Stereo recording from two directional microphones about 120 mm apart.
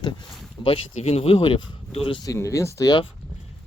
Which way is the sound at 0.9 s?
65° left (ahead or behind).